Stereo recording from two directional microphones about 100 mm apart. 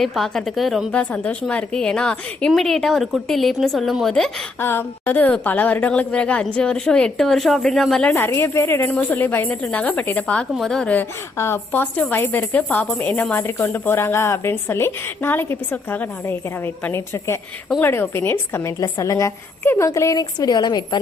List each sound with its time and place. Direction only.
0.0 s a woman's voice: centre (ahead or behind)
0.9 s a woman's voice: 10° left (ahead or behind)
4.6 s a woman's voice: 20° left (ahead or behind); by 8.1 s 5° left (ahead or behind)
8.1 s a woman's voice: 25° left (ahead or behind); by 10.9 s 5° left (ahead or behind)
11.3 s a woman's voice: 25° left (ahead or behind); by 21.0 s 45° left (ahead or behind)